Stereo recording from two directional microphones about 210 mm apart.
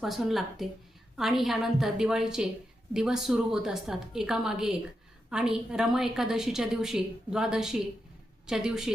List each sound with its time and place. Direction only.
0.0 s a woman's voice: centre (ahead or behind)